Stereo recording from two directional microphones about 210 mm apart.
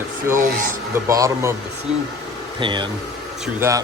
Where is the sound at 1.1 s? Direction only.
15° right (ahead or behind).